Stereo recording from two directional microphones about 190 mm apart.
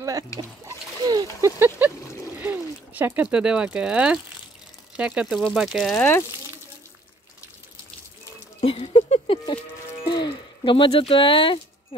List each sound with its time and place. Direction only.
0.7 s splash: 20° right (ahead or behind)
2.4 s speech: 10° right (ahead or behind)
8.5 s patter: 30° left (ahead or behind)
10.0 s a sound: 25° left (ahead or behind)